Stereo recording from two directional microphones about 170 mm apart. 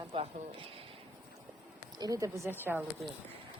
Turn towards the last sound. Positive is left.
turn(degrees=-10)  # may be behind; listen again after turning